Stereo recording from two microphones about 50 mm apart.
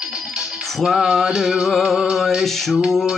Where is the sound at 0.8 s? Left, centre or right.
Centre.